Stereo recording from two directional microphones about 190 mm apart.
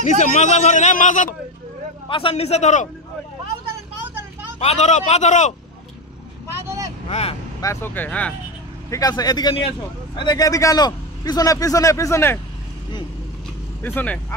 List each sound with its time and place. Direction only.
0.0 s speech: 40° left (ahead or behind)
2.0 s speech: 30° left (ahead or behind)
4.6 s speech: 35° left (ahead or behind)
6.6 s vehicle: 15° right (ahead or behind)
7.1 s speech: 35° left (ahead or behind)
7.6 s speech: 15° left (ahead or behind)
8.9 s a man's voice: 20° left (ahead or behind)
13.8 s speech: 10° left (ahead or behind)